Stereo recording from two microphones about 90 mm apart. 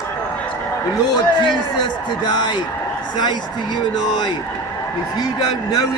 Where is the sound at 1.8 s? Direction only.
55° left (ahead or behind).